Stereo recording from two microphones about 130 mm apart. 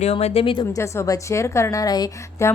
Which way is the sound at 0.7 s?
25° left (ahead or behind).